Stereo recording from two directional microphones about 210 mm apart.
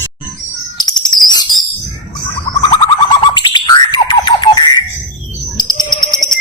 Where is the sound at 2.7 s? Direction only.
20° left (ahead or behind).